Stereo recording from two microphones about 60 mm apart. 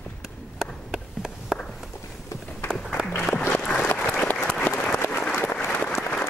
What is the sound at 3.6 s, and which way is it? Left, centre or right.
Applause, centre.